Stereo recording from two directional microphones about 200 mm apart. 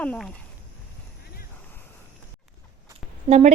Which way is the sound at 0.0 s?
5° left (ahead or behind).